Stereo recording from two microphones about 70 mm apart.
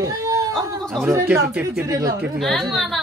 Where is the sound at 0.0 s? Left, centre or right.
Right.